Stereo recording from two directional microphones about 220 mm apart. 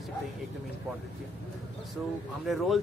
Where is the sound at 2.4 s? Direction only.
Centre (ahead or behind).